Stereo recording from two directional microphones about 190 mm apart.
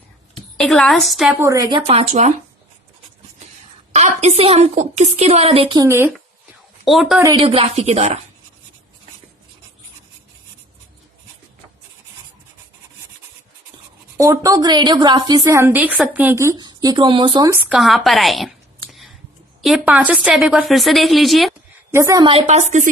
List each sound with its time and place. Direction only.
0.5 s a woman's voice: 5° left (ahead or behind)
1.4 s a woman's voice: 20° right (ahead or behind)
1.9 s a woman's voice: 35° right (ahead or behind)
3.9 s a woman's voice: 35° right (ahead or behind)
5.8 s speech: 15° right (ahead or behind)
6.8 s a woman's voice: centre (ahead or behind)
7.3 s a woman's voice: 30° right (ahead or behind)
14.2 s a woman's voice: 15° right (ahead or behind)
17.7 s a woman's voice: centre (ahead or behind)
21.9 s a woman's voice: 20° right (ahead or behind); by 22.9 s 35° right (ahead or behind)